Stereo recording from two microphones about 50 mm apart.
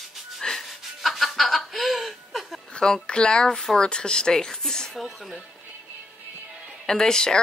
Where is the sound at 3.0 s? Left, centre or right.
Centre.